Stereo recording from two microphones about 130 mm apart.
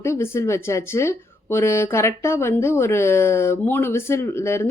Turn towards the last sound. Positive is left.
turn(degrees=20)  # may be behind; listen again after turning